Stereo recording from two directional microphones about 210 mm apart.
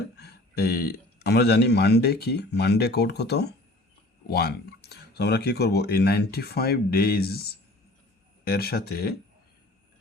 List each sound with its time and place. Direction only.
0.2 s speech: 50° left (ahead or behind)